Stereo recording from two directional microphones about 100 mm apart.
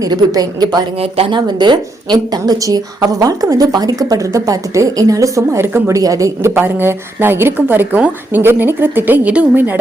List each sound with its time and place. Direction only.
0.0 s a woman's voice: 40° right (ahead or behind)
0.9 s speech: 75° right (ahead or behind)
1.3 s a woman's voice: 45° right (ahead or behind); by 9.7 s 15° right (ahead or behind)